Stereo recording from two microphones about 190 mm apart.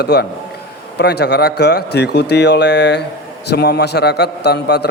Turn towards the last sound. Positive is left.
turn(degrees=60)  # may be behind; listen again after turning